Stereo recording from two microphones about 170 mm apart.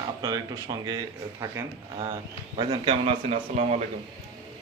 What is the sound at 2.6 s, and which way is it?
Speech, 35° right (ahead or behind).